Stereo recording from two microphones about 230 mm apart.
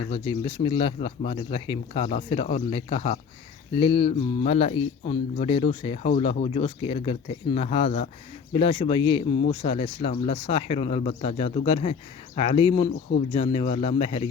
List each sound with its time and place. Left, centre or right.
0.1 s speech: left